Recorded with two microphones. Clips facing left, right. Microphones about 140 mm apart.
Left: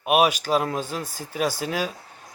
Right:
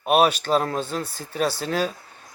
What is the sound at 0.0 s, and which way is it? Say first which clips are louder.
Speech: right 1 dB; 10° left (ahead or behind).